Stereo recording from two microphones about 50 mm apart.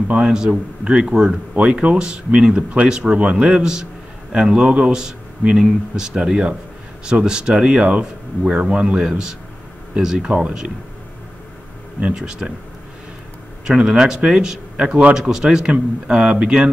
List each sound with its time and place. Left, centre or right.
0.3 s a man's voice: centre
1.5 s speech: right
3.4 s a man's voice: centre
12.2 s a man's voice: centre
13.7 s a man's voice: centre